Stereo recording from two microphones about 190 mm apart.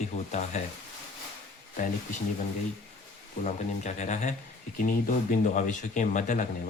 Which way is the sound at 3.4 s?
40° left (ahead or behind).